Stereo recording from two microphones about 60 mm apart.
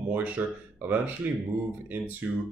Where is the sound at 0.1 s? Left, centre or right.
Right.